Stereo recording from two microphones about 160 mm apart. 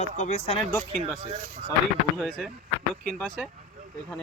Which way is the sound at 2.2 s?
Centre (ahead or behind).